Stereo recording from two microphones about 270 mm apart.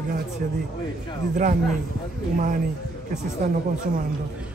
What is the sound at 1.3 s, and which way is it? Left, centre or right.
Speech, right.